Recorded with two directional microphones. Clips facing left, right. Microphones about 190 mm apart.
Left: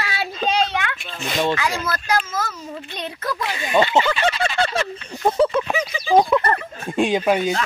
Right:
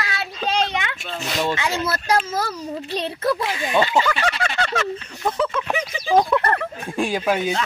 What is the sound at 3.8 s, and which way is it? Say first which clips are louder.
Speech: left 2 dB; 20° left (ahead or behind).